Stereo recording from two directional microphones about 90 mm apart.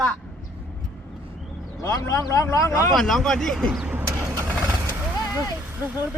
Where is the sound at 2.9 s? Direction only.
5° left (ahead or behind).